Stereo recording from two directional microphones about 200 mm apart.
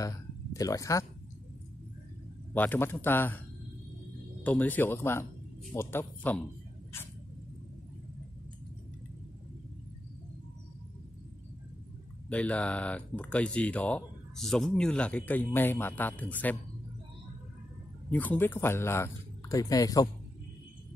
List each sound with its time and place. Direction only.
0.0 s a sound: 15° left (ahead or behind)
2.5 s speech: 10° left (ahead or behind)
4.4 s speech: 10° left (ahead or behind)
12.3 s speech: 5° left (ahead or behind)
18.1 s speech: 10° left (ahead or behind)